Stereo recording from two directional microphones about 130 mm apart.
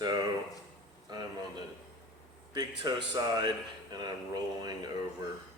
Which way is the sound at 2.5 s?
30° right (ahead or behind).